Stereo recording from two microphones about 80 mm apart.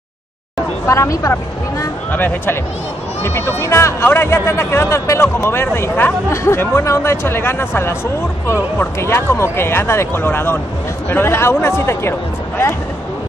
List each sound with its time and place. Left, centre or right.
0.8 s speech: left
2.1 s speech: left
6.3 s speech: left
9.0 s speech: left